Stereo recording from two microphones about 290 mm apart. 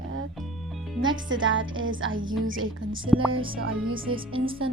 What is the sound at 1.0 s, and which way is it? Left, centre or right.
Speech, centre.